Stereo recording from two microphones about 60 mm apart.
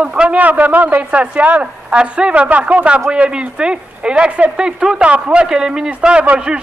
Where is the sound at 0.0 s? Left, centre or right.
Centre.